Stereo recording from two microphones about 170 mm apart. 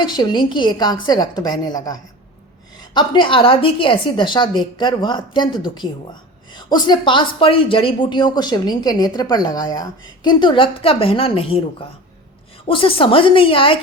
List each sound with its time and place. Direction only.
0.0 s speech: 25° left (ahead or behind)